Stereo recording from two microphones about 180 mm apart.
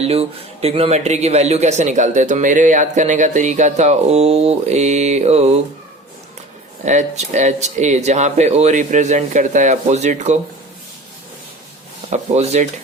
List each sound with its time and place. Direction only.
0.0 s a man's voice: 35° right (ahead or behind)
6.8 s a man's voice: 40° right (ahead or behind)
12.1 s a man's voice: 40° right (ahead or behind)